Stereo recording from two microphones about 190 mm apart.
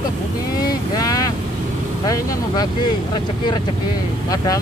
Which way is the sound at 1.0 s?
20° left (ahead or behind).